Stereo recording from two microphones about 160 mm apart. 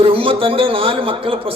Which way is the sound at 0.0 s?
35° right (ahead or behind).